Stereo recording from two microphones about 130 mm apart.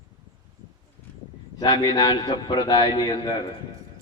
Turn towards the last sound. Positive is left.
turn(degrees=35)  # may be behind; listen again after turning